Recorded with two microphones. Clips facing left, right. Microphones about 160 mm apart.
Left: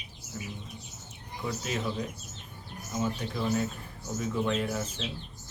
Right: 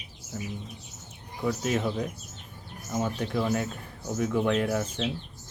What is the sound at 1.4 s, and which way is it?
Speech, 50° right (ahead or behind).